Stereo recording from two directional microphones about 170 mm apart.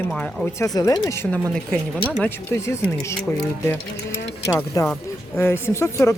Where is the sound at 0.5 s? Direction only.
20° left (ahead or behind).